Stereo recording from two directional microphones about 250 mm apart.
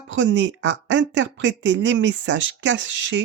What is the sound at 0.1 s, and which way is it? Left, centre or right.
Speech, right.